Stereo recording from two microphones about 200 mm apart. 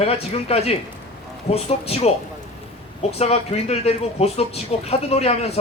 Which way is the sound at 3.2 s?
30° left (ahead or behind).